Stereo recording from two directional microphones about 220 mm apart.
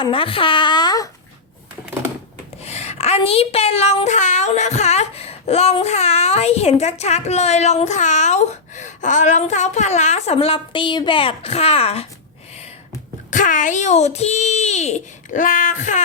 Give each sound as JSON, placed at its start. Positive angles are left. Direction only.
{"t": 0.0, "sound": "speech", "side_deg": 25}
{"t": 2.6, "sound": "speech", "side_deg": 30}
{"t": 13.3, "sound": "a child's voice", "side_deg": 35}